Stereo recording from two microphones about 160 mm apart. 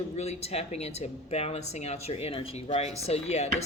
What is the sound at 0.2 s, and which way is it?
Speech, 40° left (ahead or behind).